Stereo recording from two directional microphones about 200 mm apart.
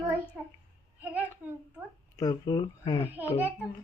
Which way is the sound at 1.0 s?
10° right (ahead or behind).